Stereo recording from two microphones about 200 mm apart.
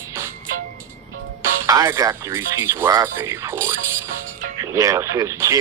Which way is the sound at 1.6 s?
15° right (ahead or behind).